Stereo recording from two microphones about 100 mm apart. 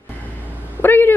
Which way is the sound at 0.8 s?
20° left (ahead or behind).